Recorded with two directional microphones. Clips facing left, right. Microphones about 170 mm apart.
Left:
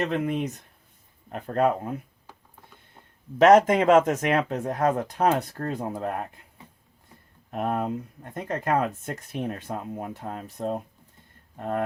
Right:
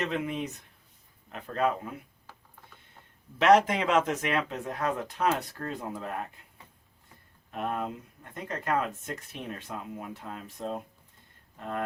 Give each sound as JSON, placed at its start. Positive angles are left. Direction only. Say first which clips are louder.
{"t": 0.0, "sound": "speech", "louder": "left 5 dB", "side_deg": 40}
{"t": 2.3, "sound": "a sound", "louder": "left 2 dB", "side_deg": 15}
{"t": 3.3, "sound": "speech", "louder": "left 5 dB", "side_deg": 45}
{"t": 7.5, "sound": "speech", "louder": "left 6 dB", "side_deg": 45}